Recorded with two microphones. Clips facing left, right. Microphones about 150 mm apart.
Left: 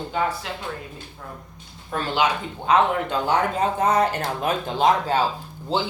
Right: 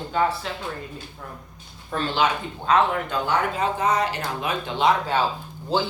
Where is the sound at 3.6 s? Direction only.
50° left (ahead or behind).